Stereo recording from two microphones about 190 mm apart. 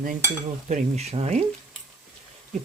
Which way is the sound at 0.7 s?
35° right (ahead or behind).